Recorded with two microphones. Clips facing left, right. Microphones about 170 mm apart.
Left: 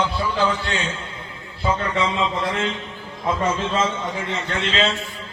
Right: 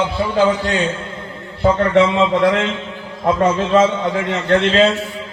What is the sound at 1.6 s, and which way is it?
Speech, 65° right (ahead or behind).